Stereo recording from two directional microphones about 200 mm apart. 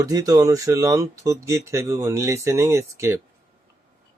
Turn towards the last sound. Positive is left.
turn(degrees=-15)  # may be behind; listen again after turning